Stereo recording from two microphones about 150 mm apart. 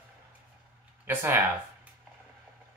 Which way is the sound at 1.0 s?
15° right (ahead or behind).